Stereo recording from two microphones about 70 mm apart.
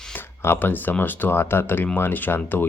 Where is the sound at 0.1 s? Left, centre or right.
Left.